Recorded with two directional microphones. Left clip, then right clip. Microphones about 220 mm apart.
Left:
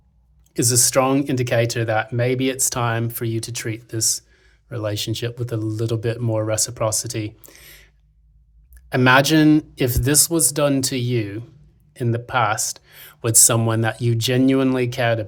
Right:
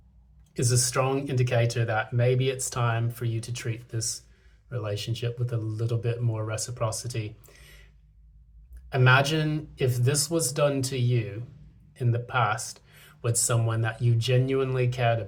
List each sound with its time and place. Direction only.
0.5 s speech: 50° left (ahead or behind)
8.9 s speech: 50° left (ahead or behind)